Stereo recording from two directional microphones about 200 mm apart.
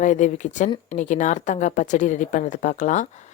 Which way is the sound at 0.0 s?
35° left (ahead or behind).